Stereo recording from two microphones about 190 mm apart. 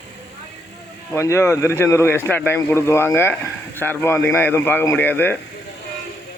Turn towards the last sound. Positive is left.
turn(degrees=10)  # may be behind; listen again after turning